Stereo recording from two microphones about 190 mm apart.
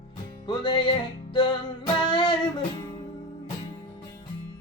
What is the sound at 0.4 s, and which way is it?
Music, 25° left (ahead or behind).